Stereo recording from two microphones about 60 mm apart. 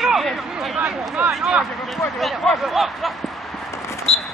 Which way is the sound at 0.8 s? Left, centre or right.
Right.